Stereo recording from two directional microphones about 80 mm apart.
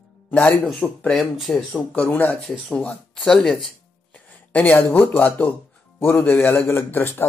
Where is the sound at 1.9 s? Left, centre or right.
Left.